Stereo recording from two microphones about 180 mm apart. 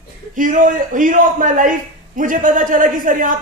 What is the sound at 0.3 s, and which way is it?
A man's voice, 45° right (ahead or behind).